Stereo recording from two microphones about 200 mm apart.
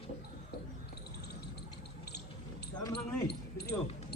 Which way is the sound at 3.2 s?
55° left (ahead or behind).